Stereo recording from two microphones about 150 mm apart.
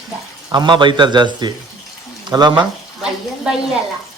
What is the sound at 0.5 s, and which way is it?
A man's voice, 30° right (ahead or behind).